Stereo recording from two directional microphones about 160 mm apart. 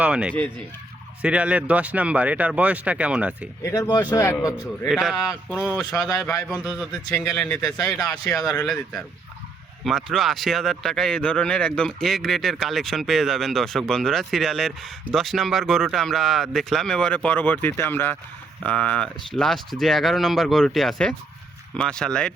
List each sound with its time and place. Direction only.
0.0 s speech: 5° right (ahead or behind)
3.6 s a man's voice: 20° left (ahead or behind)
4.9 s speech: centre (ahead or behind)